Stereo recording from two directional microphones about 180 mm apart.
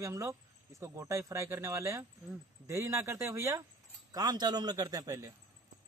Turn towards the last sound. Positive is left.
turn(degrees=-20)  # may be behind; listen again after turning